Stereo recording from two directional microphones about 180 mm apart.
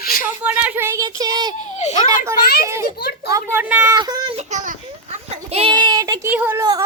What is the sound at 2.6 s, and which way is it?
A child's voice, 15° right (ahead or behind).